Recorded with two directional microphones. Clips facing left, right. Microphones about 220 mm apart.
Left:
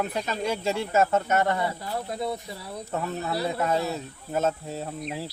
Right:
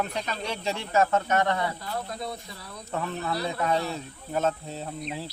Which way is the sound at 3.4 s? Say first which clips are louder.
Left 2 dB; 5° left (ahead or behind).